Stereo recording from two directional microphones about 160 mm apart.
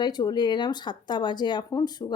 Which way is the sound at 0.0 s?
25° left (ahead or behind).